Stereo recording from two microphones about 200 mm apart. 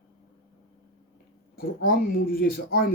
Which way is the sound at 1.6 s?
45° left (ahead or behind).